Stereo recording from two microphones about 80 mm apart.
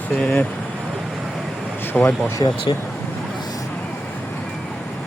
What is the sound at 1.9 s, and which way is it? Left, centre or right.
Speech, left.